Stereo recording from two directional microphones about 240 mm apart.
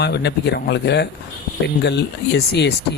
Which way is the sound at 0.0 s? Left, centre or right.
Left.